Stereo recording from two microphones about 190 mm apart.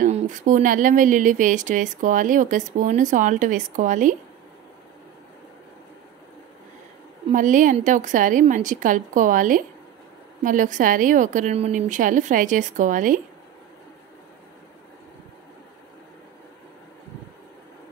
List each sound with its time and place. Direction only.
0.0 s speech: 40° right (ahead or behind)
7.2 s a woman's voice: 45° right (ahead or behind)